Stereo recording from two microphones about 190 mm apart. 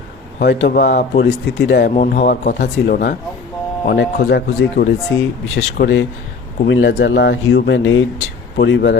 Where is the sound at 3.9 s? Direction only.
65° left (ahead or behind).